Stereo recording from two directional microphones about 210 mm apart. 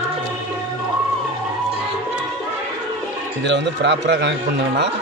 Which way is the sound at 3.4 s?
55° right (ahead or behind).